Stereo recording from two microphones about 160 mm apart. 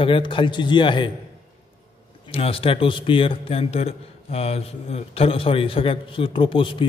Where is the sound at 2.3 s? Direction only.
35° left (ahead or behind).